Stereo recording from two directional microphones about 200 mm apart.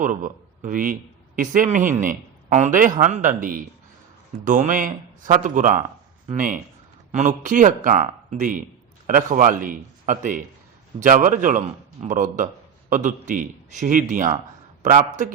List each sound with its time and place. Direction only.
0.0 s a man's voice: 40° right (ahead or behind)